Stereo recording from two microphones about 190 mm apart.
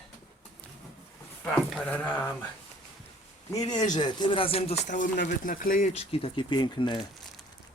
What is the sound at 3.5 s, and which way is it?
Speech, 20° left (ahead or behind).